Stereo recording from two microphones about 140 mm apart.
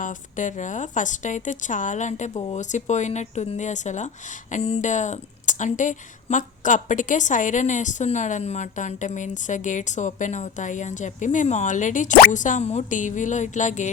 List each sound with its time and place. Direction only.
0.0 s a woman's voice: 65° left (ahead or behind)